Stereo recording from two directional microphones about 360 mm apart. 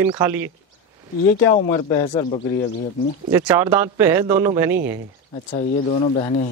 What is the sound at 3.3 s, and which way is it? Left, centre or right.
Speech, centre.